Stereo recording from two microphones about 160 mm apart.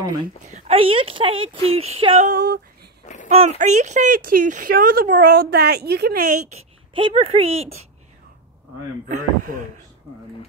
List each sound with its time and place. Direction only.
0.5 s a woman's voice: 40° right (ahead or behind)
2.2 s speech: 70° right (ahead or behind)
3.3 s speech: 40° right (ahead or behind); by 6.4 s 65° right (ahead or behind)
6.5 s speech: 35° right (ahead or behind)
9.1 s speech: 50° right (ahead or behind)